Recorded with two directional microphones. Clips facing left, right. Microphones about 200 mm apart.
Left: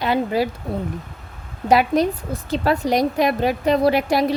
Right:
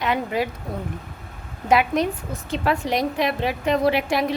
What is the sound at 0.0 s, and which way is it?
Speech, 35° left (ahead or behind).